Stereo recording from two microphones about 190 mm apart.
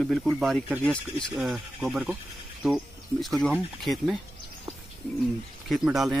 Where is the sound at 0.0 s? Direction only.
Centre (ahead or behind).